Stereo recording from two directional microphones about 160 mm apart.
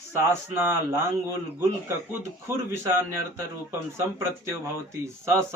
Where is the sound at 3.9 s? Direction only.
15° right (ahead or behind).